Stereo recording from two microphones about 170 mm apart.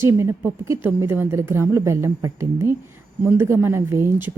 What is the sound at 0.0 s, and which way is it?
Speech, 15° right (ahead or behind).